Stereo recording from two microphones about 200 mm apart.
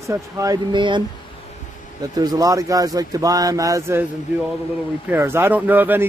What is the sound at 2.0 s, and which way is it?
Speech, 20° right (ahead or behind).